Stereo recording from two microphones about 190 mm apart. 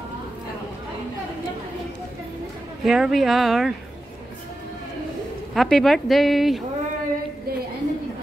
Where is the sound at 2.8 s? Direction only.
Centre (ahead or behind).